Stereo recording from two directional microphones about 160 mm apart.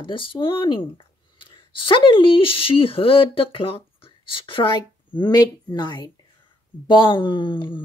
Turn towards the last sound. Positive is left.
turn(degrees=30)  # may be behind; listen again after turning